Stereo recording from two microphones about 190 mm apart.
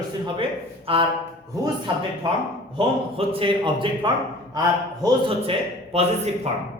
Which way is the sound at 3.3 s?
25° right (ahead or behind).